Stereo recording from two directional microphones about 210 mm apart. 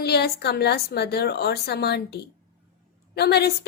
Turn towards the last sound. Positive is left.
turn(degrees=50)  # may be behind; listen again after turning